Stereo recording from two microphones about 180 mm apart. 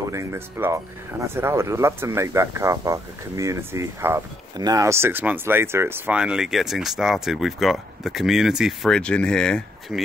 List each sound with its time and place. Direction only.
0.1 s speech: 15° right (ahead or behind); by 10.0 s centre (ahead or behind)